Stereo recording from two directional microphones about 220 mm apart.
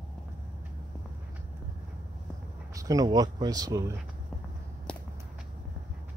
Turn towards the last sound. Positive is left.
turn(degrees=5)  # may be behind; listen again after turning